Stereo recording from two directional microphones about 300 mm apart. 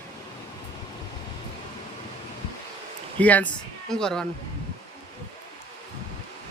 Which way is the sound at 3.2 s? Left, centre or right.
Centre.